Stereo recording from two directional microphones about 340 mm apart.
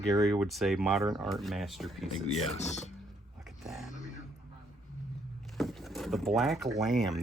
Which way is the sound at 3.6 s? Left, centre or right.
Centre.